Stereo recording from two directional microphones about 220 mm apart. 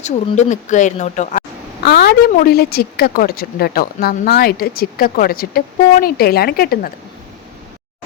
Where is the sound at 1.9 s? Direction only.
45° left (ahead or behind).